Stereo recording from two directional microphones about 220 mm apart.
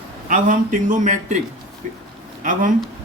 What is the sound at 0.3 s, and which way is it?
Speech, 35° right (ahead or behind).